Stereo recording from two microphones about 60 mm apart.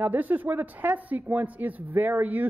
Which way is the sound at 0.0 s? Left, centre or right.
Right.